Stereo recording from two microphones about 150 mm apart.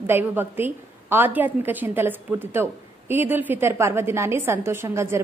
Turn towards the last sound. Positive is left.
turn(degrees=-20)  # may be behind; listen again after turning